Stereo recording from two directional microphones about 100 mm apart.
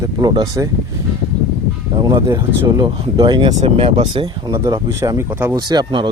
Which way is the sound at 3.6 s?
80° right.